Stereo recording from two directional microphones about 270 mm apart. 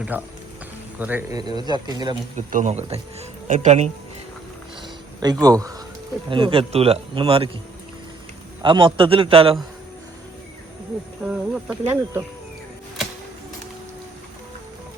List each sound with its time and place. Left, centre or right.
0.1 s speech: centre
2.5 s speech: right
5.2 s speech: centre
8.6 s speech: centre
11.2 s speech: centre